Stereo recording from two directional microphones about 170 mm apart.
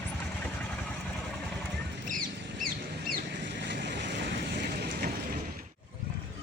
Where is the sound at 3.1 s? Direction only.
90° right; by 5.1 s 65° right (ahead or behind).